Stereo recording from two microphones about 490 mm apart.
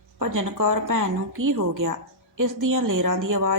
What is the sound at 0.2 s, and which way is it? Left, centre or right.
A woman's voice, right.